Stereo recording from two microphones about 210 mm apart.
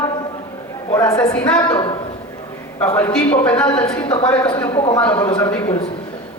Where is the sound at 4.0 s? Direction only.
20° left (ahead or behind).